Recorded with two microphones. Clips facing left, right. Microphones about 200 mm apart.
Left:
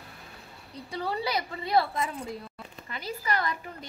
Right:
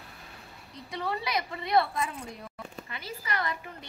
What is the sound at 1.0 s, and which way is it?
A woman's voice, 30° left (ahead or behind).